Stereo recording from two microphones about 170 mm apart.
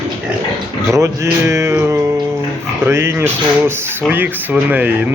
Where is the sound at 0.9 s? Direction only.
15° right (ahead or behind).